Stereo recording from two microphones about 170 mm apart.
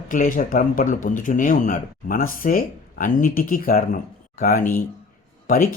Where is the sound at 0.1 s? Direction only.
50° left (ahead or behind).